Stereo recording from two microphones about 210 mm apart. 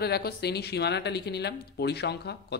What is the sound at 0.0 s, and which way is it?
Speech, 50° left (ahead or behind).